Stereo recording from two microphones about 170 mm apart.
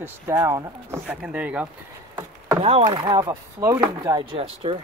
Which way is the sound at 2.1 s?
15° right (ahead or behind).